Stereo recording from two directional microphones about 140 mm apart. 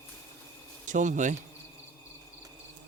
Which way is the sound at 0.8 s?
60° right (ahead or behind).